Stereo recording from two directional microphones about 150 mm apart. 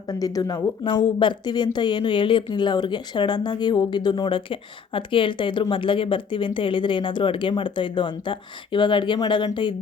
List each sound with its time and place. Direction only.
0.1 s speech: 25° left (ahead or behind)